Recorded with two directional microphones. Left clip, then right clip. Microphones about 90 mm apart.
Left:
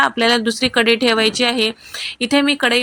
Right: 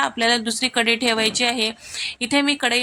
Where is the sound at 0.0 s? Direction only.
30° left (ahead or behind).